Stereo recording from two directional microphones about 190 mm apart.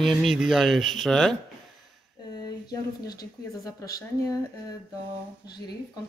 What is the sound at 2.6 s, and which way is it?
Speech, 20° left (ahead or behind).